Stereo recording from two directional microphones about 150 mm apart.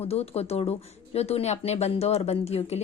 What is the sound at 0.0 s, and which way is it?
A woman's voice, 45° left (ahead or behind).